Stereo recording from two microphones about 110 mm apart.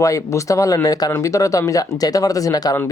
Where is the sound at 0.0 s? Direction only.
30° left (ahead or behind).